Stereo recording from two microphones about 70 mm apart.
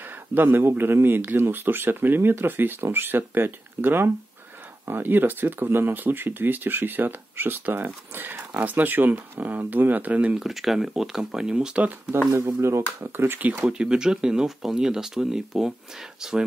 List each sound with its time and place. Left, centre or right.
0.0 s speech: right
10.3 s speech: centre
12.5 s speech: right
13.7 s speech: centre